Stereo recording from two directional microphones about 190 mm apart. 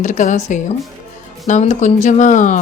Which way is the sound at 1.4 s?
40° left (ahead or behind).